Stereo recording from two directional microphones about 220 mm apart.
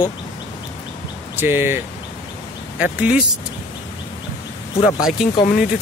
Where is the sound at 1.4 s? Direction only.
10° right (ahead or behind).